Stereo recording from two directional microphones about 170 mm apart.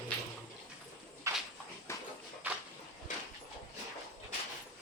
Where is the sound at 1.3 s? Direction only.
15° right (ahead or behind).